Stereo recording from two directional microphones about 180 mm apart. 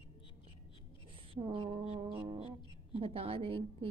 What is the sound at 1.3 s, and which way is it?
Speech, 30° right (ahead or behind).